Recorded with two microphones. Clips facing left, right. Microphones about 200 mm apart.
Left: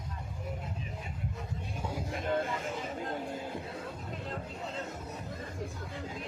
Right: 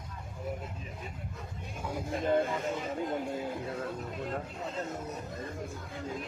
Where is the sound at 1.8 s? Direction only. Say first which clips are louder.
Right 2 dB; 25° left (ahead or behind).